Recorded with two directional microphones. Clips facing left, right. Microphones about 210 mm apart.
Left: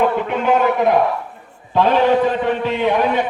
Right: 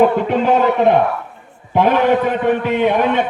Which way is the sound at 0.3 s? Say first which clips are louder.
Right 2 dB; 30° right (ahead or behind).